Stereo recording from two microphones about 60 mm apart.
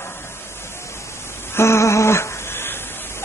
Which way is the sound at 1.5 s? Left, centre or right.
Left.